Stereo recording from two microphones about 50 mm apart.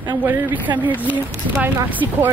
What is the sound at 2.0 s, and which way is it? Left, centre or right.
Speech, right.